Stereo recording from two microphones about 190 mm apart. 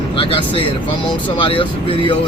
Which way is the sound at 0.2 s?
30° left (ahead or behind).